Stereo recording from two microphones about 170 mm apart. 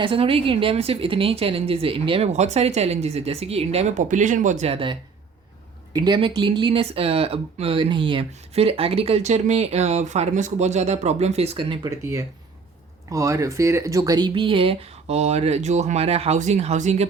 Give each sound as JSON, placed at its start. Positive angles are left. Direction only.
{"t": 0.0, "sound": "speech", "side_deg": -35}